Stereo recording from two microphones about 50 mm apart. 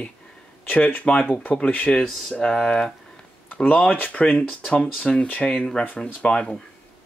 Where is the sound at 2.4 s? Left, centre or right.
Centre.